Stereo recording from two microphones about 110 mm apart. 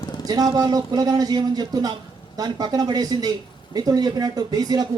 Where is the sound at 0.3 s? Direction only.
35° right (ahead or behind).